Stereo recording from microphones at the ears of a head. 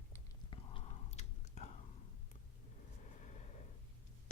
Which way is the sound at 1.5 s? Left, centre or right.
Left.